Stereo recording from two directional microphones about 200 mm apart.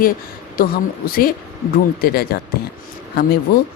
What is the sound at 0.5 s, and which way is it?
A woman's voice, 45° left (ahead or behind).